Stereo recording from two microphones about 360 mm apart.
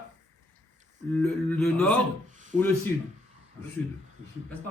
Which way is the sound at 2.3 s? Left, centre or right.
Right.